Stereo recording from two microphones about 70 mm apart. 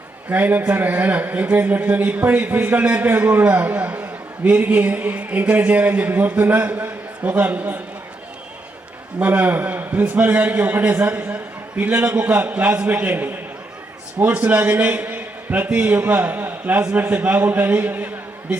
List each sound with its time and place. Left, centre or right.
0.3 s a man's voice: right
9.2 s a man's voice: right